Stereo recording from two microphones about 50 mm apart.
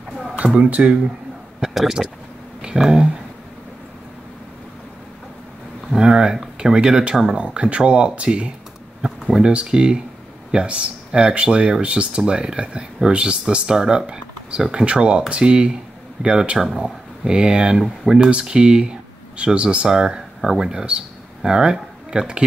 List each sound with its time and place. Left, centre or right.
0.4 s speech: right
1.6 s speech: centre
5.9 s speech: centre